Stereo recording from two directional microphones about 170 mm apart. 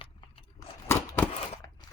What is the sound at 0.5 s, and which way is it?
Scissors, 15° left (ahead or behind).